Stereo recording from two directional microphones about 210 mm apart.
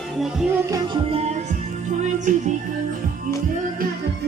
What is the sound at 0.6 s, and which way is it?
Music, 20° right (ahead or behind).